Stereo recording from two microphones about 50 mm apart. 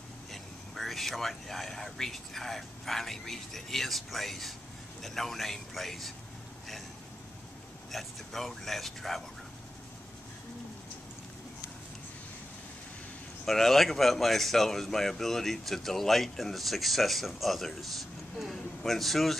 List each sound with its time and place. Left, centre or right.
0.3 s speech: centre
7.9 s speech: centre
13.5 s speech: centre